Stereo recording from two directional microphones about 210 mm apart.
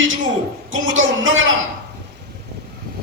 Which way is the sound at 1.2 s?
70° right (ahead or behind).